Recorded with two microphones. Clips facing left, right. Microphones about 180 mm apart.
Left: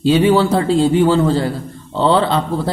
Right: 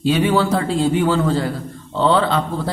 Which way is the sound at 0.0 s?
30° left (ahead or behind).